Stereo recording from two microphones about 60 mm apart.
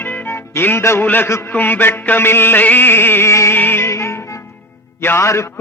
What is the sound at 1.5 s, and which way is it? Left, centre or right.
Music, left.